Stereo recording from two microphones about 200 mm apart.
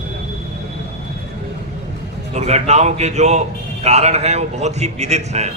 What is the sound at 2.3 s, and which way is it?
A man's voice, 35° right (ahead or behind).